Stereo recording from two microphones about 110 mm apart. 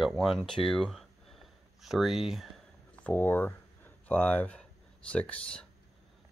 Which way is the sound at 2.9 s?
15° left (ahead or behind).